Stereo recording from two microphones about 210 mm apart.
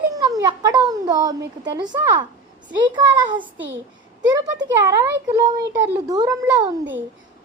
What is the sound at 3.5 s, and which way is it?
Speech, 60° right (ahead or behind).